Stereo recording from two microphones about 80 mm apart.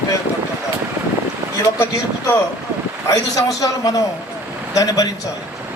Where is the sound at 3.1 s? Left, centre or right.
Left.